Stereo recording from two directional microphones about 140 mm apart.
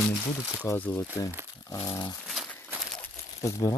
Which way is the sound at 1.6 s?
25° left (ahead or behind).